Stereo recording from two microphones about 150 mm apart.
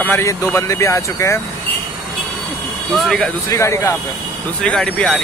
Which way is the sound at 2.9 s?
5° left (ahead or behind).